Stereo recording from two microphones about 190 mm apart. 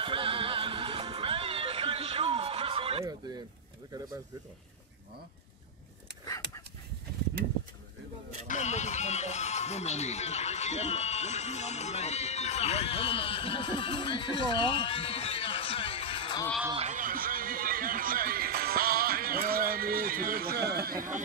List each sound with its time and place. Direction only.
0.0 s music: 25° right (ahead or behind)
8.5 s speech: 40° left (ahead or behind)
16.7 s music: 40° right (ahead or behind)